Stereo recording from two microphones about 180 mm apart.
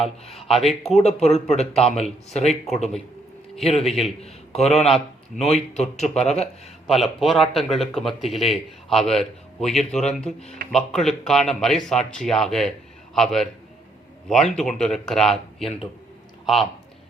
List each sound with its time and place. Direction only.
0.3 s speech: centre (ahead or behind)
0.9 s speech: 40° left (ahead or behind)
3.6 s a man's voice: 35° left (ahead or behind)
6.8 s speech: centre (ahead or behind)
14.5 s speech: 5° left (ahead or behind)